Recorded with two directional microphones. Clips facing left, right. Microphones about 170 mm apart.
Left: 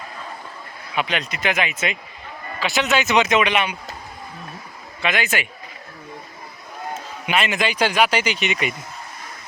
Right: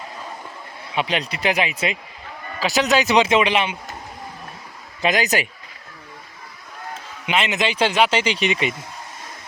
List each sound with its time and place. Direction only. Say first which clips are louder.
0.9 s speech: right 1 dB; 30° right (ahead or behind)
5.0 s speech: right 3 dB; 40° right (ahead or behind)
7.3 s speech: even; 20° right (ahead or behind)